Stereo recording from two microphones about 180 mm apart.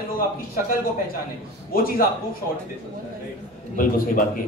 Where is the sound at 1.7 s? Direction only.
55° left (ahead or behind).